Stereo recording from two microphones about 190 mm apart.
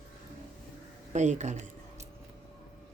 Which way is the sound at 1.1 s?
40° right (ahead or behind).